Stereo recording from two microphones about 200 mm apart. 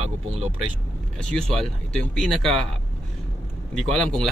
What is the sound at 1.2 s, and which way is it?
Speech, 5° left (ahead or behind).